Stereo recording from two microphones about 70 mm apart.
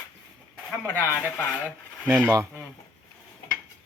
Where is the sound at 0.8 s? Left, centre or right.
Left.